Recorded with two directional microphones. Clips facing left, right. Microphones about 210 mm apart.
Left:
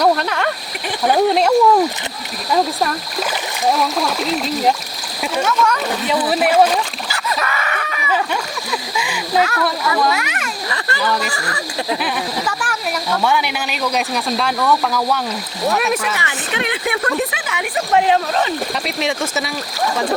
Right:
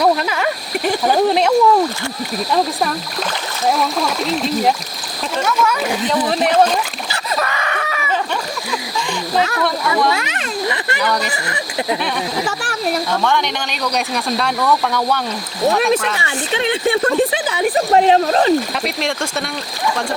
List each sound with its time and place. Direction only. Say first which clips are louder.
0.0 s speech: even; 5° right (ahead or behind)
3.7 s speech: even; centre (ahead or behind)
6.2 s speech: left 1 dB; 5° left (ahead or behind)
7.3 s a sound: right 1 dB; 30° right (ahead or behind)
9.4 s speech: even; 30° right (ahead or behind)
12.5 s a sound: right 2 dB; 30° right (ahead or behind)
13.2 s speech: even; 5° left (ahead or behind)
16.1 s speech: right 2 dB; 30° right (ahead or behind)
18.9 s speech: left 1 dB; 5° left (ahead or behind)